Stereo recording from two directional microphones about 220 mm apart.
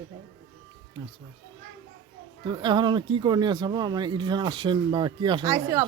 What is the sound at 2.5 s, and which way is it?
Speech, 20° right (ahead or behind).